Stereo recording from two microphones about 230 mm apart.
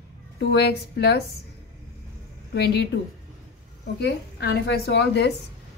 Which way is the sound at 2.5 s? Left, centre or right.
Left.